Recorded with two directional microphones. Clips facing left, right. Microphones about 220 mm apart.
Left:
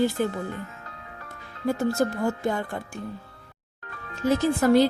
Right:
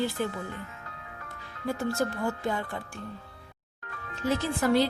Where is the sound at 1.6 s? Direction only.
45° left (ahead or behind).